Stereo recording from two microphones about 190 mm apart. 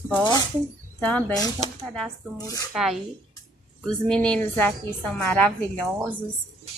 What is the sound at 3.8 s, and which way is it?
A woman's voice, 5° left (ahead or behind).